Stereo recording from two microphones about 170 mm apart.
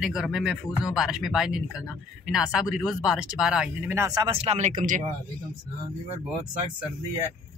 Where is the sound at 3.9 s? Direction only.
20° right (ahead or behind).